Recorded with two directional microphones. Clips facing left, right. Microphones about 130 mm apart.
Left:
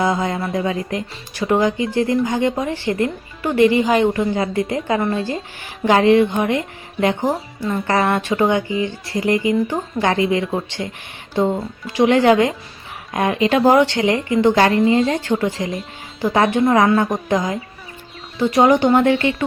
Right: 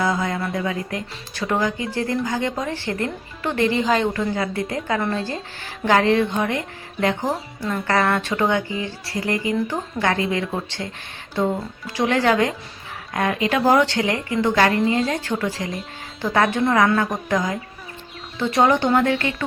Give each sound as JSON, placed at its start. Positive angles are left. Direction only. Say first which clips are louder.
{"t": 0.0, "sound": "music", "louder": "left 3 dB", "side_deg": 20}
{"t": 0.5, "sound": "a woman's voice", "louder": "left 4 dB", "side_deg": 25}
{"t": 18.9, "sound": "a woman's voice", "louder": "left 4 dB", "side_deg": 25}